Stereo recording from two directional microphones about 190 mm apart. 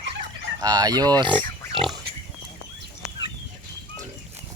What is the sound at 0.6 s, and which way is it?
Fowl, 20° right (ahead or behind).